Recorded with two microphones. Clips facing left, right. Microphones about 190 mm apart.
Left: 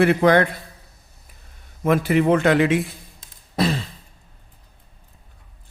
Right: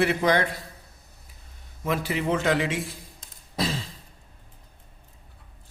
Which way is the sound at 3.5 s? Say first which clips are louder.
Left 7 dB; 60° left (ahead or behind).